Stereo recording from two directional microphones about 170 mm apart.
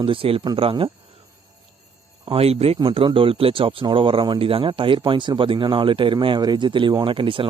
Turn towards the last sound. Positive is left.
turn(degrees=-30)  # may be behind; listen again after turning